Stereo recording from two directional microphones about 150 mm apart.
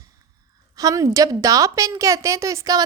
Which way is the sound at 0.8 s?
25° right (ahead or behind).